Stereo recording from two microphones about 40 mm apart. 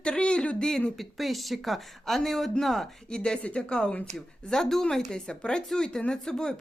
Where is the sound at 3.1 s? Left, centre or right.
Centre.